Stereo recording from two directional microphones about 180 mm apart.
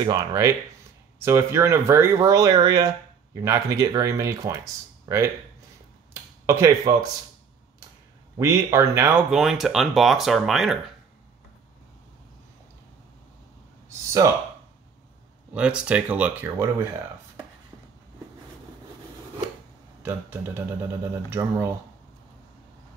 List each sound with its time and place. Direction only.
0.0 s speech: 20° right (ahead or behind)
6.4 s speech: 15° right (ahead or behind)
8.4 s speech: 15° right (ahead or behind); by 10.8 s centre (ahead or behind)
13.8 s a sound: 15° right (ahead or behind)
15.5 s speech: 5° right (ahead or behind)
20.0 s speech: 10° right (ahead or behind)